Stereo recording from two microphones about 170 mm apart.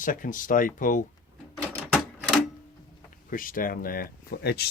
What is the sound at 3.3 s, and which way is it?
Speech, 55° left (ahead or behind).